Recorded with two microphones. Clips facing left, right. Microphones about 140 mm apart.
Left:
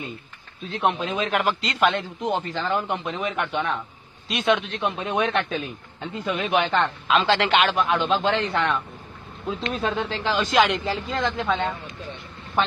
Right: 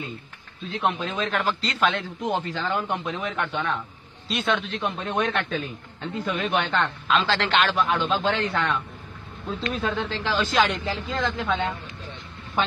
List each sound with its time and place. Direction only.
0.7 s a man's voice: 15° left (ahead or behind)
9.9 s a man's voice: 5° left (ahead or behind)